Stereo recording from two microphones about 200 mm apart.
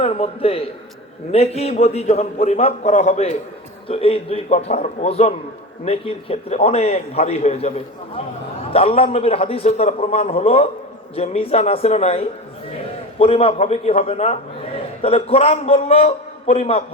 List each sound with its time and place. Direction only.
0.0 s a man's voice: 30° left (ahead or behind)
8.7 s a man's voice: 30° left (ahead or behind)